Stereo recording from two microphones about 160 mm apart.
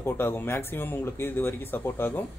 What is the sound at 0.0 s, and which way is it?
A man's voice, 15° left (ahead or behind).